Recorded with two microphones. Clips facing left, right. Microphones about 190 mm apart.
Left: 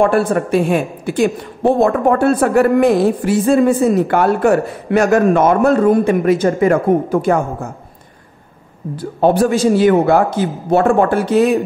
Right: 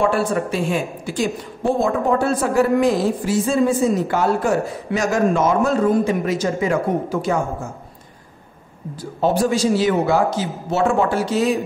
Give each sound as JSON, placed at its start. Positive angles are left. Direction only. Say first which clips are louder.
{"t": 0.0, "sound": "speech", "louder": "left 5 dB", "side_deg": 55}
{"t": 8.9, "sound": "speech", "louder": "left 6 dB", "side_deg": 60}